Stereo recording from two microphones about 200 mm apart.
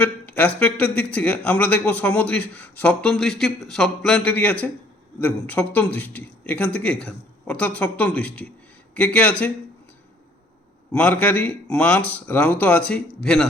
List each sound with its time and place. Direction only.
0.0 s speech: 10° left (ahead or behind)
10.9 s speech: 5° left (ahead or behind)